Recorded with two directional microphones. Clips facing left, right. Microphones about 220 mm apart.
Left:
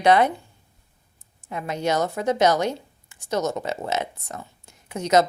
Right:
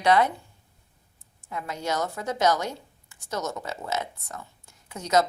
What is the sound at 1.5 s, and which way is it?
A woman's voice, 20° left (ahead or behind).